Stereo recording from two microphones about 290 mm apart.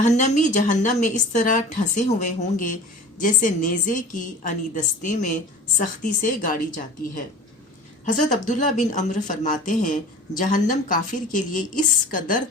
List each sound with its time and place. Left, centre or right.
0.0 s speech: left
8.0 s speech: left